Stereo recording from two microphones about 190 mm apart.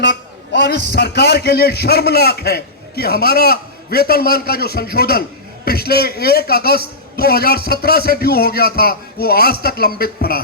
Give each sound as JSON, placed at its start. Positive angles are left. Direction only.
{"t": 0.5, "sound": "a man's voice", "side_deg": 55}